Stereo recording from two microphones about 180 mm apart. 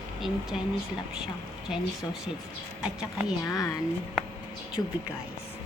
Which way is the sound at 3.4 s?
15° left (ahead or behind).